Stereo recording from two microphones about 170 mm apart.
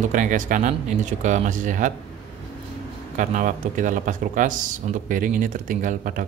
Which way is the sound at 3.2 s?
50° right (ahead or behind).